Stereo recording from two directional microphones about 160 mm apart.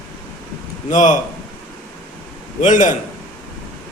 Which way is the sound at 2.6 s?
50° left (ahead or behind).